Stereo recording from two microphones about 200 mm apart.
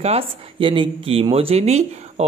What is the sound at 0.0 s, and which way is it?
Speech, 30° right (ahead or behind).